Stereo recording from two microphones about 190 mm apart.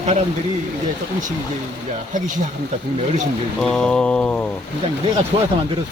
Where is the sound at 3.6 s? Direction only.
5° left (ahead or behind).